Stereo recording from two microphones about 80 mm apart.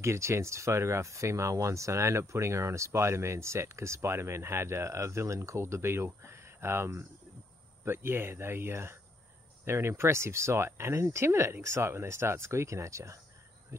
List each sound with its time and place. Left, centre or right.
0.0 s speech: right